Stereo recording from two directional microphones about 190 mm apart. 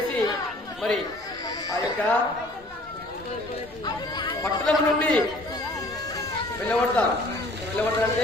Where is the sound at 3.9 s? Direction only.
25° left (ahead or behind).